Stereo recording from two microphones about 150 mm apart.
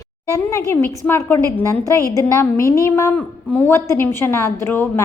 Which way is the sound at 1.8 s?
20° right (ahead or behind).